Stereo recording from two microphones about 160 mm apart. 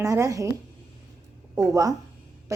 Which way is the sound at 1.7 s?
20° right (ahead or behind).